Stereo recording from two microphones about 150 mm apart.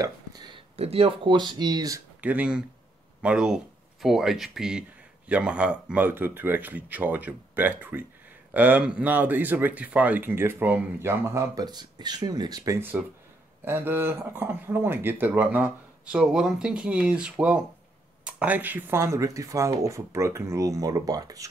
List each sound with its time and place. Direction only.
0.0 s a sound: 25° right (ahead or behind)
0.7 s speech: 40° right (ahead or behind); by 2.0 s 25° right (ahead or behind)
2.2 s speech: 10° right (ahead or behind); by 21.5 s 25° right (ahead or behind)